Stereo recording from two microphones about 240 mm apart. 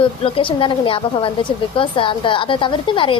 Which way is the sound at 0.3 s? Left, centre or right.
Left.